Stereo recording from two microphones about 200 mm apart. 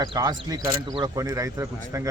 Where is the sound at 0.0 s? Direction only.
20° right (ahead or behind).